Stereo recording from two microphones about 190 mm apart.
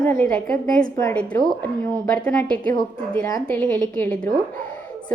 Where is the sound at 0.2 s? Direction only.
5° left (ahead or behind).